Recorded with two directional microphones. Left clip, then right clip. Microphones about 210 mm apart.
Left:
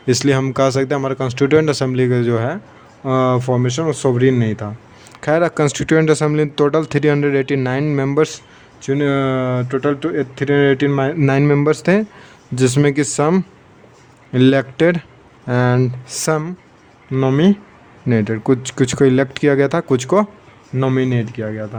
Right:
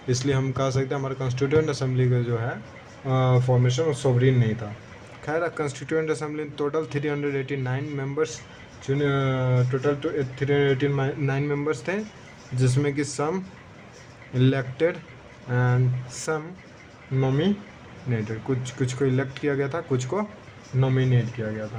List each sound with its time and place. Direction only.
0.1 s speech: 45° left (ahead or behind)